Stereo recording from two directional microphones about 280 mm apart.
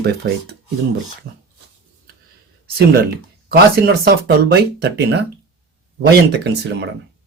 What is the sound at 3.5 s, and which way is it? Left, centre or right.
Speech, right.